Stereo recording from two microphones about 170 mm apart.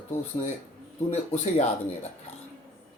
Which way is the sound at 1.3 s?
40° left (ahead or behind).